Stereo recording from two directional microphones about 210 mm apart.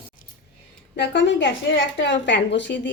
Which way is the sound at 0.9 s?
55° left (ahead or behind).